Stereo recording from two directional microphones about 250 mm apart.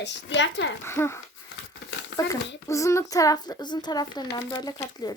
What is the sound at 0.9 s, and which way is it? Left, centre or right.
Speech, centre.